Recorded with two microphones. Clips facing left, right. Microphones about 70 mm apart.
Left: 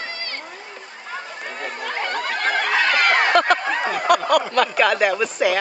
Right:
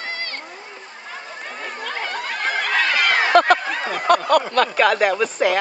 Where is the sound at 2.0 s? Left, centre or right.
Left.